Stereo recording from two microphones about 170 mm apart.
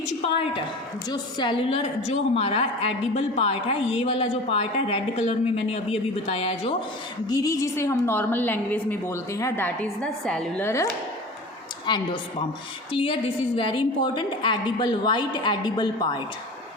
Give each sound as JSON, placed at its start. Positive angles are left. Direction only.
{"t": 0.2, "sound": "a woman's voice", "side_deg": 35}
{"t": 7.3, "sound": "a woman's voice", "side_deg": 20}
{"t": 11.9, "sound": "a woman's voice", "side_deg": 25}